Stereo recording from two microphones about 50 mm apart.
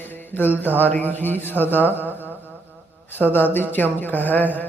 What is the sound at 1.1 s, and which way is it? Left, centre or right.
Speech, left.